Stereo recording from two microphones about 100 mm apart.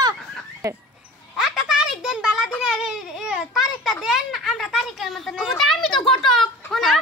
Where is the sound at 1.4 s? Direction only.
5° right (ahead or behind).